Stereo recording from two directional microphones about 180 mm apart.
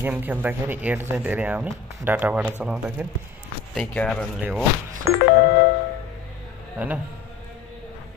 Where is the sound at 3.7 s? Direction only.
5° left (ahead or behind).